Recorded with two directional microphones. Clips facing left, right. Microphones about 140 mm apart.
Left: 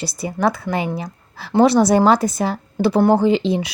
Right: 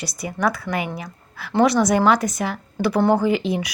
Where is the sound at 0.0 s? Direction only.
30° left (ahead or behind).